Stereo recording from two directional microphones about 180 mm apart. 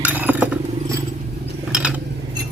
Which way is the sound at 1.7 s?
5° right (ahead or behind).